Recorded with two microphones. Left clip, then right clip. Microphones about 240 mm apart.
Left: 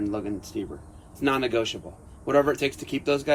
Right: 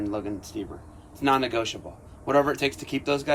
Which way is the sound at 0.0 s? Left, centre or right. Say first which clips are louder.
Left 1 dB; right.